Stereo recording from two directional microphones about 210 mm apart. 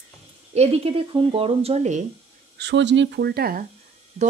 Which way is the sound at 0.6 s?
25° right (ahead or behind).